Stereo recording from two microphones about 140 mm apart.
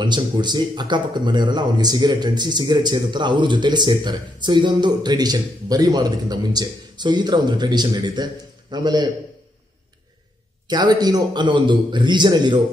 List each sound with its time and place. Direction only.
0.0 s speech: 30° right (ahead or behind)
10.7 s speech: 30° right (ahead or behind)